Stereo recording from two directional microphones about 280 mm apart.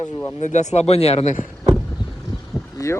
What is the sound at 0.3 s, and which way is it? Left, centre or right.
Speech, left.